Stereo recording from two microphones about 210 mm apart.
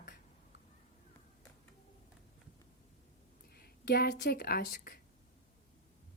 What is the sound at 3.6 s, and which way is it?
A woman's voice, 50° left (ahead or behind).